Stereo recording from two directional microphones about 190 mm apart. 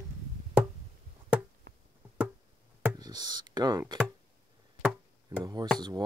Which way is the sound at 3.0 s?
20° right (ahead or behind).